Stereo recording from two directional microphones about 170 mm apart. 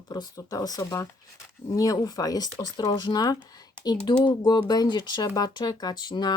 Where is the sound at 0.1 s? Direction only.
20° left (ahead or behind).